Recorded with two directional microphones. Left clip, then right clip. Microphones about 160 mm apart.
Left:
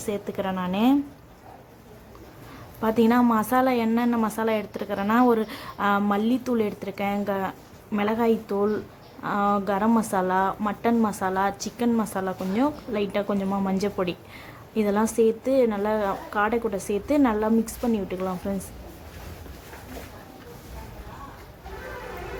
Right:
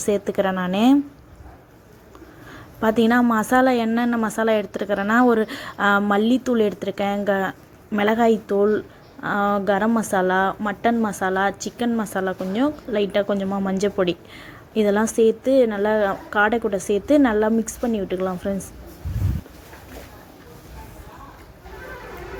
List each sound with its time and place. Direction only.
0.0 s a woman's voice: 30° right (ahead or behind)
2.8 s a woman's voice: 20° right (ahead or behind)